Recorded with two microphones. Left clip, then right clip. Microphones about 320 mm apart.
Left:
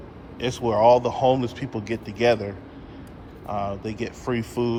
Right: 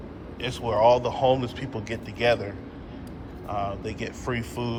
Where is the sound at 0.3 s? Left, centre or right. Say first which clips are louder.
Left 2 dB; left.